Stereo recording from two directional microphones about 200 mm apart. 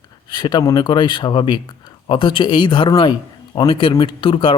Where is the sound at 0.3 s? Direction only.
20° left (ahead or behind).